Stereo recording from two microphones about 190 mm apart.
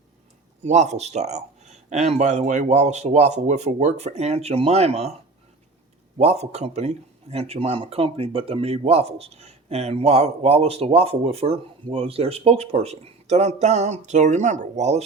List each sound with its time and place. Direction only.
0.6 s speech: 35° right (ahead or behind)
6.1 s speech: 35° right (ahead or behind)